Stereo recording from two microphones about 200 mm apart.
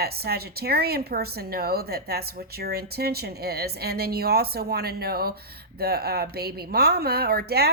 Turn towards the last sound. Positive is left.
turn(degrees=-50)  # may be behind; listen again after turning